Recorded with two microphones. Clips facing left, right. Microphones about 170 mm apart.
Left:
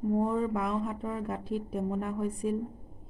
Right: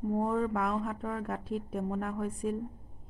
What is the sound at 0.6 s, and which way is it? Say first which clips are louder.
A woman's voice: left 1 dB; centre (ahead or behind).